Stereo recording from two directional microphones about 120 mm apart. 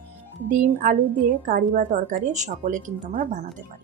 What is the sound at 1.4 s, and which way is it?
Speech, 90° right.